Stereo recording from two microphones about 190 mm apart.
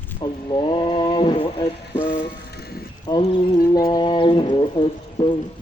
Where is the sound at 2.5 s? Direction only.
55° left (ahead or behind).